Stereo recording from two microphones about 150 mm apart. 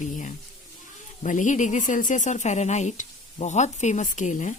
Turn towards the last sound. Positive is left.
turn(degrees=55)  # may be behind; listen again after turning